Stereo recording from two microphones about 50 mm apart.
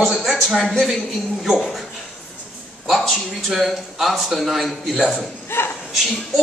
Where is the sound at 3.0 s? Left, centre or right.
Centre.